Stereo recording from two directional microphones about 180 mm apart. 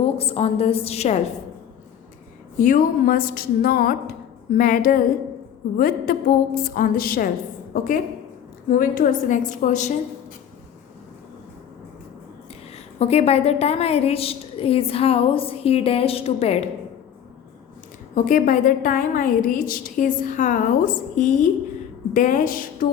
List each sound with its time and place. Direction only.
0.0 s a woman's voice: 35° left (ahead or behind)
2.6 s a woman's voice: 50° left (ahead or behind)
12.7 s a woman's voice: 35° left (ahead or behind)
18.1 s a woman's voice: 45° left (ahead or behind)